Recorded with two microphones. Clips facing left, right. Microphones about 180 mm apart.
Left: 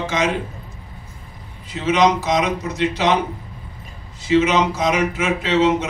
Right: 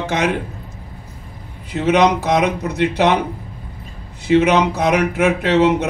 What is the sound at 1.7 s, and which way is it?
Speech, 60° right (ahead or behind).